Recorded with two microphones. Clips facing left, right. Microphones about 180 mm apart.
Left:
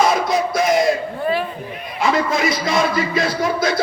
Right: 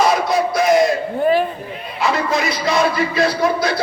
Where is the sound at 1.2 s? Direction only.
40° right (ahead or behind).